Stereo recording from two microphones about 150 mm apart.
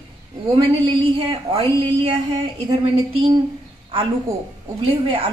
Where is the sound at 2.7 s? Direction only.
40° right (ahead or behind).